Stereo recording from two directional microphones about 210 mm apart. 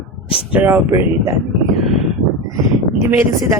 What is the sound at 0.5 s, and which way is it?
Speech, 10° right (ahead or behind).